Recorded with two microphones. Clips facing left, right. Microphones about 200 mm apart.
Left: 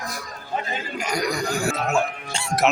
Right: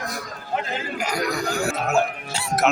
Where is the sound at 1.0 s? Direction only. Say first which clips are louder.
Left 1 dB; 5° right (ahead or behind).